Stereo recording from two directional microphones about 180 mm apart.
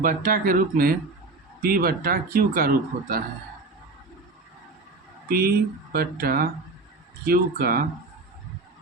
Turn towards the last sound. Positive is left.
turn(degrees=-55)  # may be behind; listen again after turning